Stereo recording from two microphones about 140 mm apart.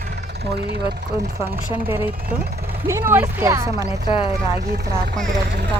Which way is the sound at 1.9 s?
15° right (ahead or behind).